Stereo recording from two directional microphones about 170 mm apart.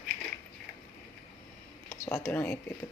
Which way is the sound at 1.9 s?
15° left (ahead or behind).